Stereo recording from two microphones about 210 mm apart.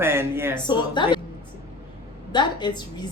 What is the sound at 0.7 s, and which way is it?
Speech, 20° left (ahead or behind).